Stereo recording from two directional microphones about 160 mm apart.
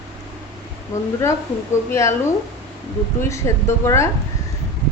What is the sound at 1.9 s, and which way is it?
Speech, 15° left (ahead or behind).